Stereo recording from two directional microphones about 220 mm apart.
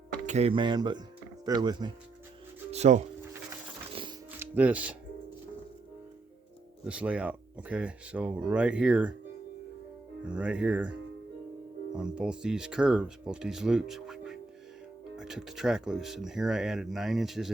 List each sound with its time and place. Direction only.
0.3 s speech: 30° right (ahead or behind)
2.7 s speech: 30° right (ahead or behind)
4.0 s music: 25° right (ahead or behind)
4.4 s speech: 5° right (ahead or behind)
6.8 s speech: 5° right (ahead or behind)
10.2 s speech: 5° right (ahead or behind)
11.9 s speech: 5° right (ahead or behind)